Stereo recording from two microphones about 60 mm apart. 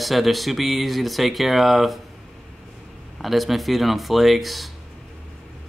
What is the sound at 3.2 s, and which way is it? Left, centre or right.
Speech, centre.